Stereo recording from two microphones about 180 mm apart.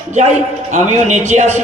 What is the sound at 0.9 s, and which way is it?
Speech, 40° right (ahead or behind).